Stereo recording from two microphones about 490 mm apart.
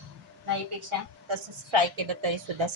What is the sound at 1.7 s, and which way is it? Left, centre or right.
Speech, right.